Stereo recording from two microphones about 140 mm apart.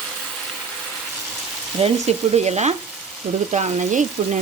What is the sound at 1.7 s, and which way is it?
Frying, 45° right (ahead or behind).